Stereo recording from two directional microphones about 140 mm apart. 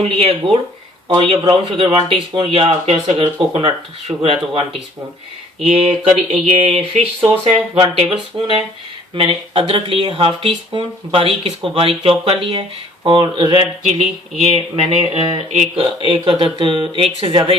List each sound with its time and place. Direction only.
0.0 s speech: 45° right (ahead or behind)
5.6 s speech: 45° right (ahead or behind)